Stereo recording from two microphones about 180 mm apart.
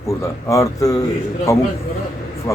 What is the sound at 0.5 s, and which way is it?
Speech, 15° left (ahead or behind).